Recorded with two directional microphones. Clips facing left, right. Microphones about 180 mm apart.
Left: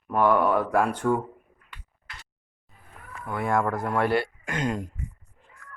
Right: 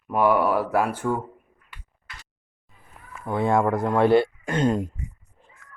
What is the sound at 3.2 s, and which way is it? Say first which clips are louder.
A man's voice: right 4 dB; 25° right (ahead or behind).